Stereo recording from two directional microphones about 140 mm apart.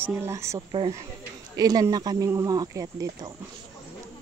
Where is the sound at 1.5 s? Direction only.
25° right (ahead or behind).